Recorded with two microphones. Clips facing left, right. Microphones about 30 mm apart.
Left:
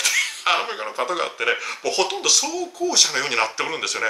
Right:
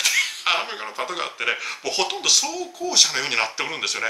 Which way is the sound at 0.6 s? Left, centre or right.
Centre.